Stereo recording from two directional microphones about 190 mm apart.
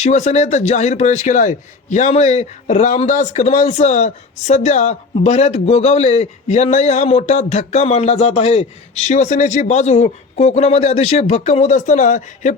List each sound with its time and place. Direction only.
0.0 s a man's voice: 35° left (ahead or behind)